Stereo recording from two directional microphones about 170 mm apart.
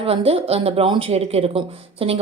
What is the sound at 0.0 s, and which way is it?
A woman's voice, 35° right (ahead or behind).